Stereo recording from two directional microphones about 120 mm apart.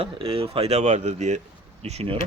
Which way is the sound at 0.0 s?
50° right (ahead or behind).